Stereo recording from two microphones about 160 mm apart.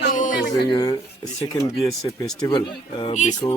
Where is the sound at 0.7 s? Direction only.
25° left (ahead or behind).